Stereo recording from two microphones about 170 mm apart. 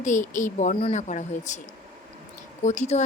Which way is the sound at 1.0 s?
45° left (ahead or behind).